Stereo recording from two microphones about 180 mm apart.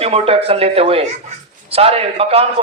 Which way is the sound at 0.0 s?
35° right (ahead or behind).